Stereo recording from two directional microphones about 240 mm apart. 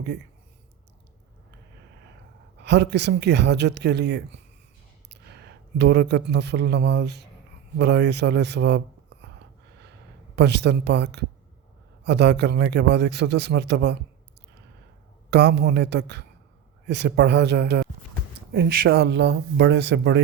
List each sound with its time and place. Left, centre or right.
2.6 s a man's voice: right
5.7 s a man's voice: right
10.3 s a man's voice: right
15.3 s a man's voice: right